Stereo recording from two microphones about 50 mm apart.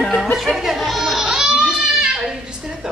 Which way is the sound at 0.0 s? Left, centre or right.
Centre.